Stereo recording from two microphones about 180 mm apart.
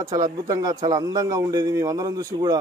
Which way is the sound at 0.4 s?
20° right (ahead or behind).